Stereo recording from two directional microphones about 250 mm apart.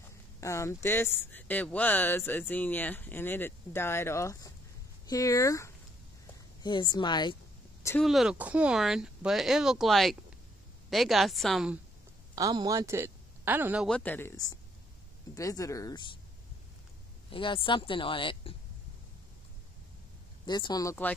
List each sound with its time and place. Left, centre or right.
0.4 s speech: centre
8.0 s speech: centre
12.4 s a man's voice: centre
17.3 s speech: centre
20.4 s speech: centre